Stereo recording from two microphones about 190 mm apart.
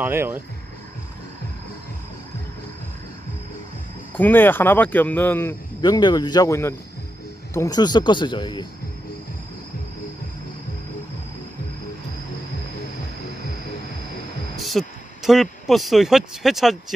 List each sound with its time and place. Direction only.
0.0 s speech: 10° right (ahead or behind)
4.2 s speech: 10° left (ahead or behind)
5.8 s speech: 20° left (ahead or behind)
14.6 s speech: centre (ahead or behind)